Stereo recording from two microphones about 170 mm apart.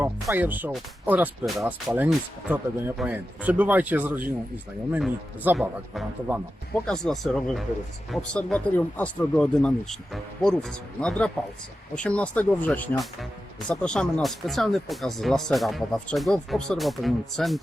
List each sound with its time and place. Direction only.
0.0 s speech: 10° right (ahead or behind)